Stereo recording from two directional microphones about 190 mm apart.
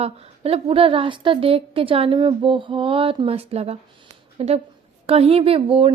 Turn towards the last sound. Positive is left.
turn(degrees=-30)  # may be behind; listen again after turning